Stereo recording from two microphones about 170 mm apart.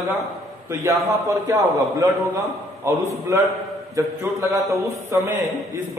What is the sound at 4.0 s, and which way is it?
A man's voice, 15° right (ahead or behind).